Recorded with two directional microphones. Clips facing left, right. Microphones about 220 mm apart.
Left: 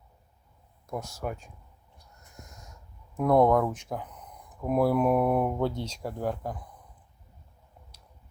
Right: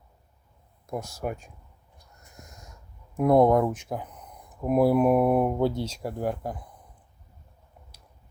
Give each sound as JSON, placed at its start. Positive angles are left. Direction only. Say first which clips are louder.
{"t": 0.9, "sound": "speech", "louder": "right 2 dB", "side_deg": -10}
{"t": 3.2, "sound": "speech", "louder": "right 2 dB", "side_deg": -10}